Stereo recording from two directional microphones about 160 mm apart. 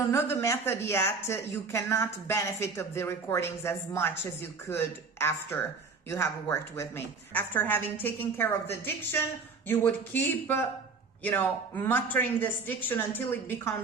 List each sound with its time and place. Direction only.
0.1 s speech: 15° left (ahead or behind)